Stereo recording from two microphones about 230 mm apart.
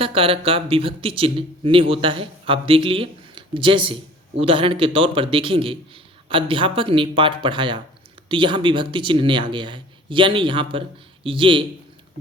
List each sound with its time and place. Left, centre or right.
0.0 s a man's voice: right